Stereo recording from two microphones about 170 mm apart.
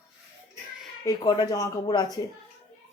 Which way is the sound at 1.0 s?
25° left (ahead or behind).